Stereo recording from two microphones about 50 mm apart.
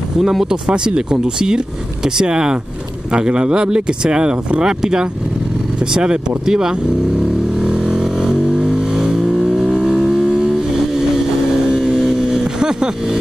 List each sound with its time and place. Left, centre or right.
0.2 s speech: centre
7.5 s vehicle: centre
11.7 s vehicle: centre